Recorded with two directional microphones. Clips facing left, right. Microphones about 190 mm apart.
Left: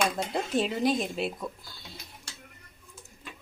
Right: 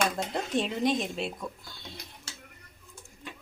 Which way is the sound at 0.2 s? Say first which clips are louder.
Left 2 dB; centre (ahead or behind).